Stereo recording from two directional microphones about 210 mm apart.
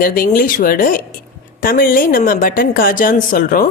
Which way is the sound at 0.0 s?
45° left (ahead or behind).